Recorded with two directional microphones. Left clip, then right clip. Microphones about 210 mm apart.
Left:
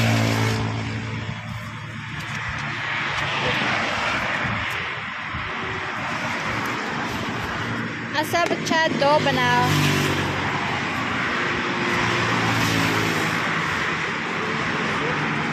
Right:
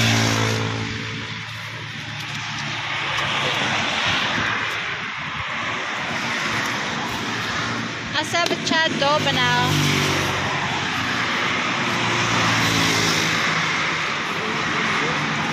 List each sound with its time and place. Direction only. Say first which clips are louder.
8.2 s speech: even; 20° left (ahead or behind)